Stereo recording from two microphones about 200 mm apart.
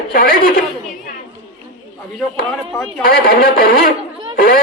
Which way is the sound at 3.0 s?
45° left (ahead or behind).